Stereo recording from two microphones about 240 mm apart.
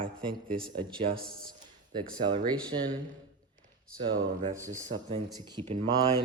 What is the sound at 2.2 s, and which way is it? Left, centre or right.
Speech, centre.